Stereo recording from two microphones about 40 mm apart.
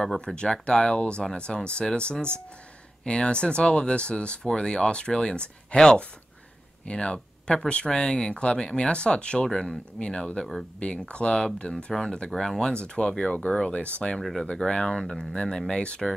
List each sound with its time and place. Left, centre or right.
0.2 s speech: centre
6.9 s speech: left
8.8 s speech: left; by 12.7 s centre
12.8 s speech: left
14.1 s speech: centre
14.5 s speech: centre